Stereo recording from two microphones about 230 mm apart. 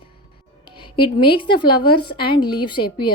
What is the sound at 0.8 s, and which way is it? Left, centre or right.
Speech, left.